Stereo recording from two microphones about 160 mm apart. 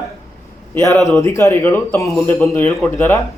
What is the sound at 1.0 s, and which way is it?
Speech, centre (ahead or behind).